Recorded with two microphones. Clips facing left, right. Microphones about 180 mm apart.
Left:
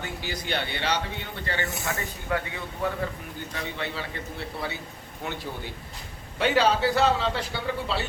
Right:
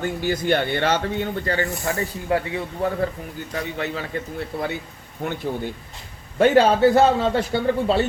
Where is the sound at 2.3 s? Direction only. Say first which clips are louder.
Right 6 dB; 30° right (ahead or behind).